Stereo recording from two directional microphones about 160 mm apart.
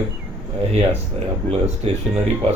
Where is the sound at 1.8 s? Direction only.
40° right (ahead or behind).